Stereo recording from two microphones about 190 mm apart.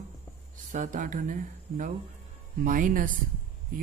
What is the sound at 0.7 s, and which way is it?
Speech, 45° right (ahead or behind).